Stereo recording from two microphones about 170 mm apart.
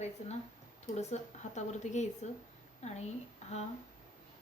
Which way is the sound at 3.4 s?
40° left (ahead or behind).